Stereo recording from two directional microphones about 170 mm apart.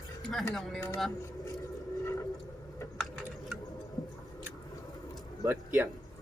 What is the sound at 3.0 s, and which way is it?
Typing, centre (ahead or behind).